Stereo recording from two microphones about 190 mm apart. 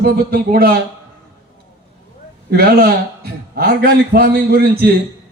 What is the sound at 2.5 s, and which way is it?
A man's voice, 55° right (ahead or behind).